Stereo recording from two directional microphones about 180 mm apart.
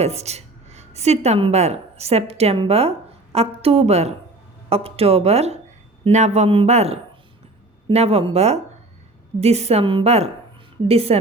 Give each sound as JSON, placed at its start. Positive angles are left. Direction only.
{"t": 0.0, "sound": "a woman's voice", "side_deg": -35}